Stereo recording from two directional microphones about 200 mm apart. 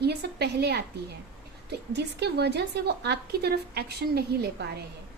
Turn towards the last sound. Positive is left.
turn(degrees=-55)  # may be behind; listen again after turning